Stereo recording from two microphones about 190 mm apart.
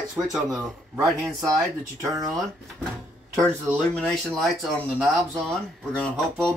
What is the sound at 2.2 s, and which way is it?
Speech, centre (ahead or behind).